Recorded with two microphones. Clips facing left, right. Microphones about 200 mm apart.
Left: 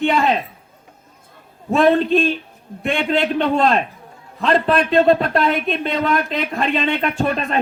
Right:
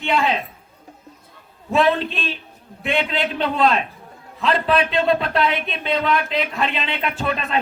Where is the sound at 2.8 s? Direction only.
50° left (ahead or behind).